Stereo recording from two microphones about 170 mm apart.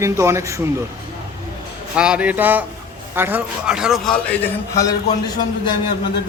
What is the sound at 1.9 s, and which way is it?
A man's voice, 5° right (ahead or behind).